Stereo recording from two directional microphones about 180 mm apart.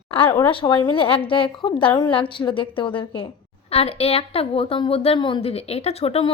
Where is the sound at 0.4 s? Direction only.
25° left (ahead or behind).